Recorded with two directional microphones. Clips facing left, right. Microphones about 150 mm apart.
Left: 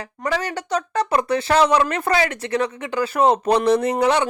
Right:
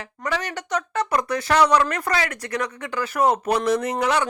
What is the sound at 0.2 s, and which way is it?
Speech, 30° left (ahead or behind).